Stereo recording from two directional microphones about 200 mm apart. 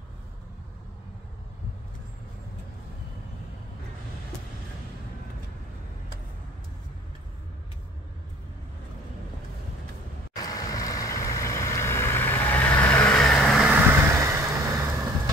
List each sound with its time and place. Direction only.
10.3 s vehicle: 20° left (ahead or behind); by 13.7 s centre (ahead or behind)
14.2 s vehicle: 15° right (ahead or behind)